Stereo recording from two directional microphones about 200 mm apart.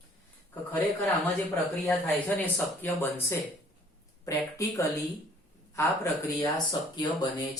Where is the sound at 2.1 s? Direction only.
10° left (ahead or behind).